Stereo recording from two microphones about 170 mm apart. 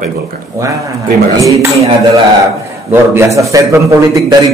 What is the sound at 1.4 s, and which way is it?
Speech, 20° right (ahead or behind).